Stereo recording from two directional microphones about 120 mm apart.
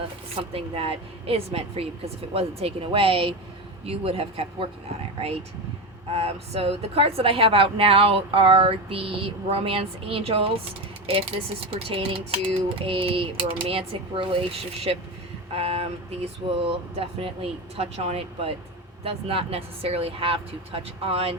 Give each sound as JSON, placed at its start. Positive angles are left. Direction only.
{"t": 0.5, "sound": "a woman's voice", "side_deg": -55}
{"t": 6.1, "sound": "a woman's voice", "side_deg": -55}
{"t": 15.5, "sound": "a woman's voice", "side_deg": -55}